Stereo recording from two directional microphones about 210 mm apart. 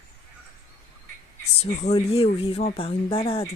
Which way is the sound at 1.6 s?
30° left (ahead or behind).